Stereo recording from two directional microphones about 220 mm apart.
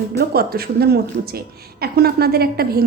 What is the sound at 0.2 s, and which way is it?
A woman's voice, 45° right (ahead or behind).